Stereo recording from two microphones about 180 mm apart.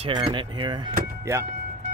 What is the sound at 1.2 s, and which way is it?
Speech, 15° right (ahead or behind).